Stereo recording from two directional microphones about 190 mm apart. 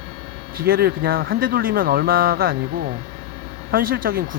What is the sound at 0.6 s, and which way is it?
Speech, 55° right (ahead or behind).